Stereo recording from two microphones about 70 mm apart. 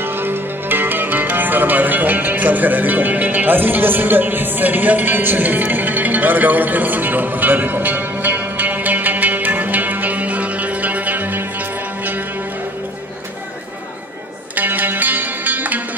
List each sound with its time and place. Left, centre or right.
0.0 s music: right
14.5 s music: right